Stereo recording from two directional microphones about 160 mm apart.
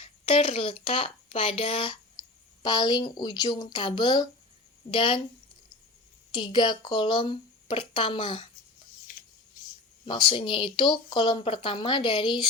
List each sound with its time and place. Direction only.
0.0 s speech: 35° left (ahead or behind)
6.3 s speech: 30° left (ahead or behind)
10.1 s speech: 30° left (ahead or behind)